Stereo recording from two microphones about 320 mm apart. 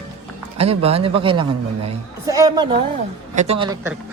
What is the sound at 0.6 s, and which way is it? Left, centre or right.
Speech, centre.